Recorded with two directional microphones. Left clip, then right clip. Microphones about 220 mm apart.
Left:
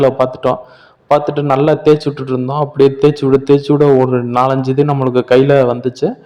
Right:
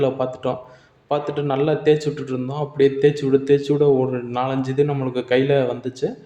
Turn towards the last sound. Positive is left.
turn(degrees=30)  # may be behind; listen again after turning